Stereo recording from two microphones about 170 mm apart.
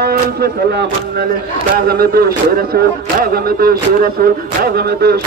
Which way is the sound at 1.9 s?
60° right (ahead or behind).